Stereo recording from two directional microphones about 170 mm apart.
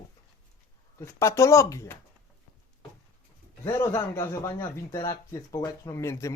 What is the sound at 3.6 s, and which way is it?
Speech, 15° left (ahead or behind).